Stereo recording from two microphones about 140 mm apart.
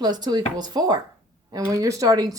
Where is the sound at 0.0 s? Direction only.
30° right (ahead or behind).